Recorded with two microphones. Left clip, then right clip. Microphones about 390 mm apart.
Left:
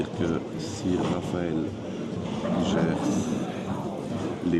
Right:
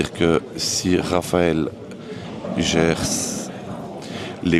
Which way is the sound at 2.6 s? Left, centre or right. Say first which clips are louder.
Right 10 dB; right.